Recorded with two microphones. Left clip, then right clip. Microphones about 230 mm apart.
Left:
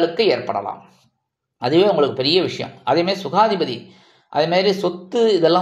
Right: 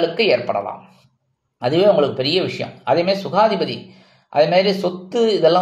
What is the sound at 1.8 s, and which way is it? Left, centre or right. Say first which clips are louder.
Speech: right 1 dB; centre.